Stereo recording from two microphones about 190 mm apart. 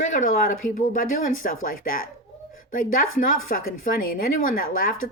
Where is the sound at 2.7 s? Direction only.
45° left (ahead or behind).